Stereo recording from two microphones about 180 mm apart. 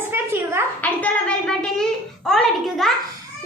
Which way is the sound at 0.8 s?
10° left (ahead or behind).